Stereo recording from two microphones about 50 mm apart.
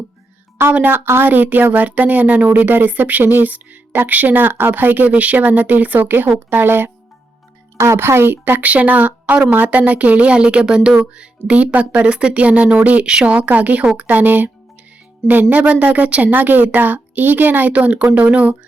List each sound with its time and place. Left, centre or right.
0.8 s speech: right
8.0 s speech: right
8.6 s speech: right